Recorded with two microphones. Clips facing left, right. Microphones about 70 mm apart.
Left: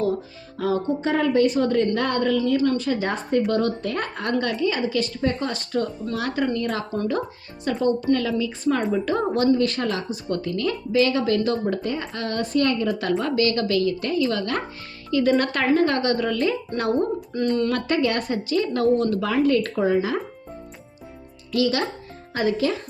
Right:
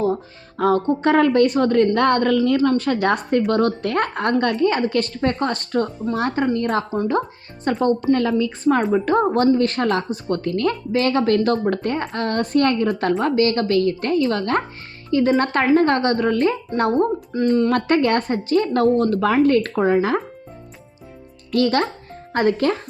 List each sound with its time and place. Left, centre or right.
0.6 s speech: right
6.1 s a woman's voice: right
17.3 s speech: centre
17.7 s speech: right
21.5 s speech: right